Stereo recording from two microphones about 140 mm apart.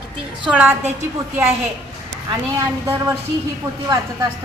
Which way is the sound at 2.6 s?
15° right (ahead or behind).